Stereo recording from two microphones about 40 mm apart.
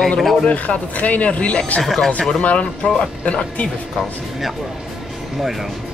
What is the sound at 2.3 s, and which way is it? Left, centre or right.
Speech, left.